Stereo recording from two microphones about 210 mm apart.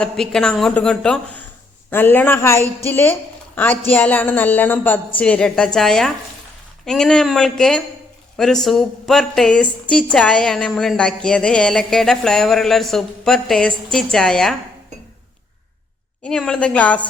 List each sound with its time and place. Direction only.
0.0 s a woman's voice: 5° left (ahead or behind)
16.2 s a woman's voice: 5° left (ahead or behind)